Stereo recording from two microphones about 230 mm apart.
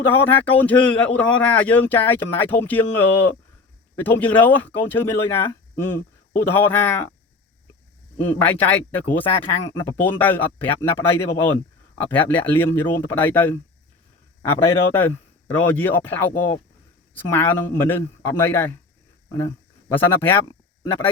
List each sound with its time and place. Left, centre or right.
0.1 s a man's voice: centre
8.3 s a man's voice: centre
14.9 s a man's voice: centre